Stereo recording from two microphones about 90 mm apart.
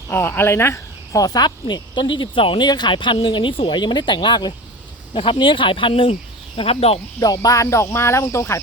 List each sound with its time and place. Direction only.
0.1 s speech: 25° left (ahead or behind); by 2.6 s 75° left (ahead or behind)
2.6 s speech: 55° left (ahead or behind); by 3.8 s 80° left
3.8 s speech: 60° left (ahead or behind)
5.1 s speech: 75° left (ahead or behind); by 7.0 s 90° left
7.2 s cricket: 40° left (ahead or behind)